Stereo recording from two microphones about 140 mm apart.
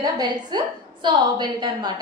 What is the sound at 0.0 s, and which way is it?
A woman's voice, 30° right (ahead or behind).